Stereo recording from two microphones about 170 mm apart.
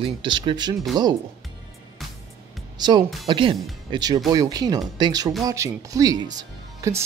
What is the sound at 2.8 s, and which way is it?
Speech, 25° right (ahead or behind).